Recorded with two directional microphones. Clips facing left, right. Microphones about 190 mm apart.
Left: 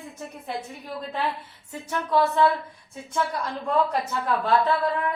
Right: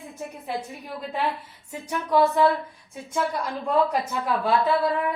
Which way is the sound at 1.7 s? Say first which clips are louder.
Right 1 dB; 15° right (ahead or behind).